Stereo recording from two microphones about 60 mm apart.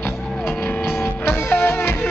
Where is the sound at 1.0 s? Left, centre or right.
Left.